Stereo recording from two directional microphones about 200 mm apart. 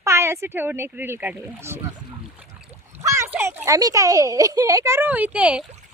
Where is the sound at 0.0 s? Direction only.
15° right (ahead or behind).